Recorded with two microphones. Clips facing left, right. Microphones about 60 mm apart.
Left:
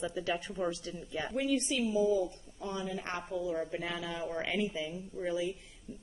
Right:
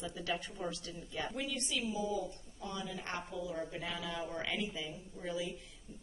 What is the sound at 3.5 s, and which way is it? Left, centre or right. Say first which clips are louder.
A woman's voice: left 5 dB; left.